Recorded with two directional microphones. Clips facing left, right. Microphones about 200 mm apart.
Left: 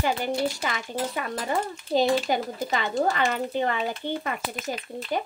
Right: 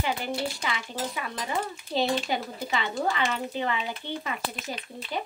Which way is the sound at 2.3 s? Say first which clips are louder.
Left 3 dB; 45° left (ahead or behind).